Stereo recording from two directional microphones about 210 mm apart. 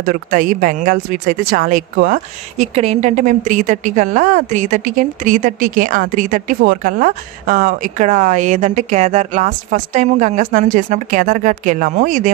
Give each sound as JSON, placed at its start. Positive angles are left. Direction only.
{"t": 0.0, "sound": "a woman's voice", "side_deg": -40}